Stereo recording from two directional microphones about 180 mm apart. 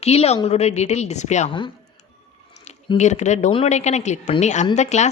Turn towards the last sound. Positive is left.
turn(degrees=40)  # may be behind; listen again after turning